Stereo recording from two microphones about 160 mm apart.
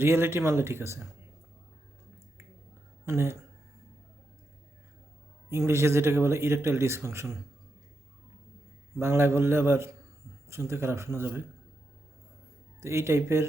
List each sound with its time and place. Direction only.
0.0 s a man's voice: 15° right (ahead or behind)
3.1 s a man's voice: 15° right (ahead or behind)
5.5 s a man's voice: 15° right (ahead or behind)
9.0 s a man's voice: 15° right (ahead or behind)
12.8 s a man's voice: 15° right (ahead or behind)